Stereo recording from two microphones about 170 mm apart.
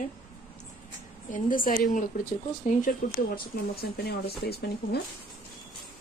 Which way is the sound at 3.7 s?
65° left (ahead or behind).